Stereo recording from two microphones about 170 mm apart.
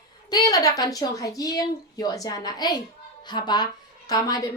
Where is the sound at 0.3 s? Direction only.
20° left (ahead or behind).